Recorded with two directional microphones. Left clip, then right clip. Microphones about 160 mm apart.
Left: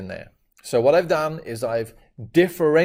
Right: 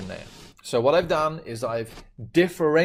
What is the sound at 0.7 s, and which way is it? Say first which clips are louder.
Speech: left 3 dB; 35° left (ahead or behind).